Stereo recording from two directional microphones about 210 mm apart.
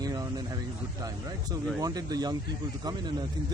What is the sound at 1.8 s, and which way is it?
Speech, 15° right (ahead or behind).